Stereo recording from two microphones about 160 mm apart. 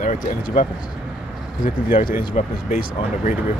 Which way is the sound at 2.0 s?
40° left (ahead or behind).